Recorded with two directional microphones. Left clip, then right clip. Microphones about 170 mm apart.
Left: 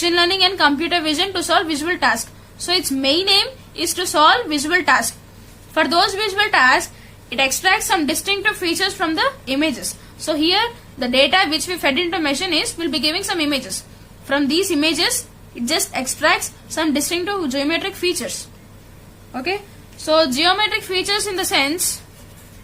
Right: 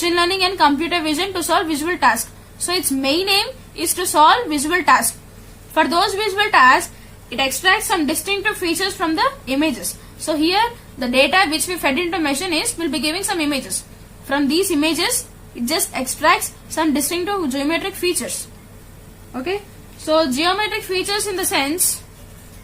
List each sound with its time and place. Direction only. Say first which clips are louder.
0.0 s a woman's voice: left 1 dB; 10° left (ahead or behind)
20.1 s a woman's voice: left 1 dB; 25° left (ahead or behind)